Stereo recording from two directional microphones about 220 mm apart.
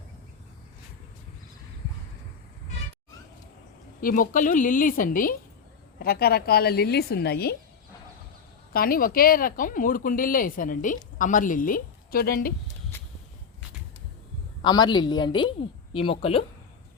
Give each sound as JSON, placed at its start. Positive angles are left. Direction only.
{"t": 4.0, "sound": "a woman's voice", "side_deg": 40}
{"t": 8.7, "sound": "speech", "side_deg": 40}
{"t": 14.6, "sound": "a woman's voice", "side_deg": 20}